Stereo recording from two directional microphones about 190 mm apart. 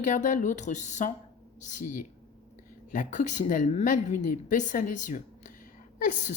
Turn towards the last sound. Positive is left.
turn(degrees=45)  # may be behind; listen again after turning